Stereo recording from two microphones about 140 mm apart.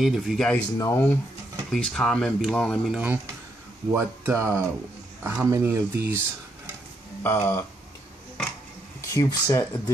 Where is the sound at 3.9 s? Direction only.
15° right (ahead or behind).